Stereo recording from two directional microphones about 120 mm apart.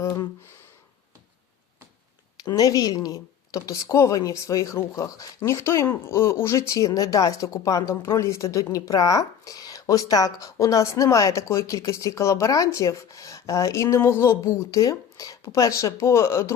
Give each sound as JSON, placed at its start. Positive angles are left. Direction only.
{"t": 2.4, "sound": "speech", "side_deg": 30}